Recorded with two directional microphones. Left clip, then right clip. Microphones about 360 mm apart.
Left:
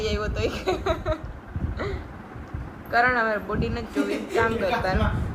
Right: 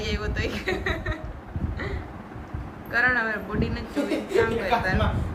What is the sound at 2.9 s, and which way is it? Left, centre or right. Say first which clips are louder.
A woman's voice: left 2 dB; centre.